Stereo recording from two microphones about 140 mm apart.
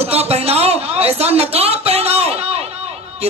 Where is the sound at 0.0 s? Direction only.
45° right (ahead or behind).